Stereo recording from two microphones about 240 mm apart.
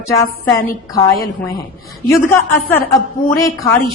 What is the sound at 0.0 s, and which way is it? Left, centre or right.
A woman's voice, centre.